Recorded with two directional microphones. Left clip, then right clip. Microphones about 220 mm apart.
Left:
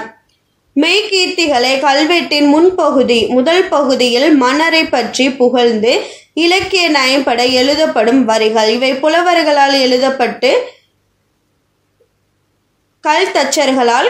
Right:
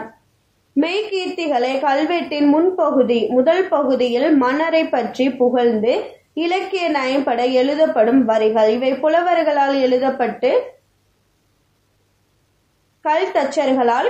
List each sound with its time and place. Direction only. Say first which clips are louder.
0.7 s a woman's voice: left 8 dB; 45° left (ahead or behind)
13.0 s a woman's voice: left 5 dB; 40° left (ahead or behind)